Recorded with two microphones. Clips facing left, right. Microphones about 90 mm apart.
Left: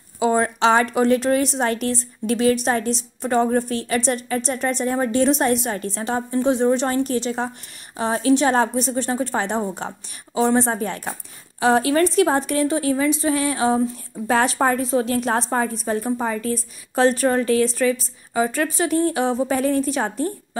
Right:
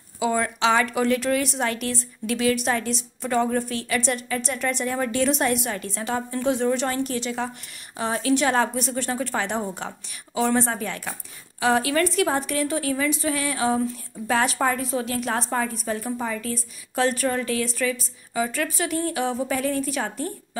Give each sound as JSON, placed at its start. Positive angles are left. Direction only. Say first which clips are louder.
{"t": 0.2, "sound": "a woman's voice", "louder": "left 4 dB", "side_deg": 35}